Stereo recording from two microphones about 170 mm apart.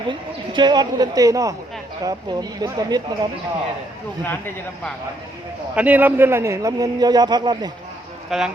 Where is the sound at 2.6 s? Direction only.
25° right (ahead or behind).